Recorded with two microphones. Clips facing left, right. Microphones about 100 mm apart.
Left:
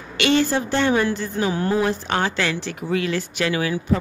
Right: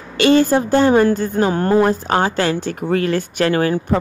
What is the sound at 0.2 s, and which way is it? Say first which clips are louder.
Speech: right 6 dB; 45° right (ahead or behind).